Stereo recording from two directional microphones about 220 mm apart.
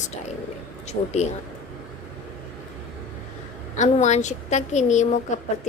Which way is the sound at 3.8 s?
30° left (ahead or behind).